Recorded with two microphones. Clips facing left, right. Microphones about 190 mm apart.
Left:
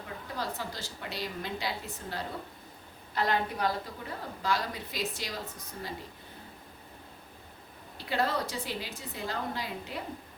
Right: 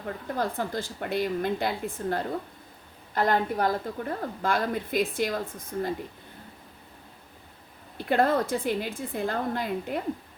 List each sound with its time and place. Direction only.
0.0 s a woman's voice: 50° right (ahead or behind)
7.9 s a woman's voice: 55° right (ahead or behind)